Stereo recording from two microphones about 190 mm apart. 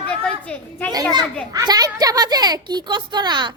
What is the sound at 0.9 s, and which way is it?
A woman's voice, 20° right (ahead or behind).